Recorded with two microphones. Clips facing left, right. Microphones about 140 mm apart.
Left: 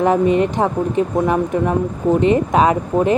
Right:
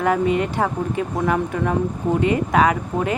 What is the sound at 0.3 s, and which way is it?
Speech, 20° left (ahead or behind).